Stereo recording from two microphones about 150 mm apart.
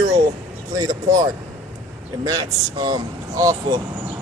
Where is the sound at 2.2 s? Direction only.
25° right (ahead or behind).